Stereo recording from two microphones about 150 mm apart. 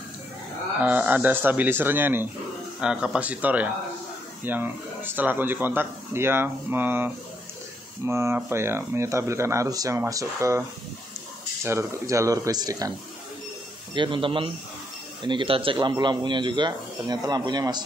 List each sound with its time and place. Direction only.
0.7 s speech: 10° right (ahead or behind)
11.6 s speech: 20° right (ahead or behind)
13.9 s speech: 35° right (ahead or behind)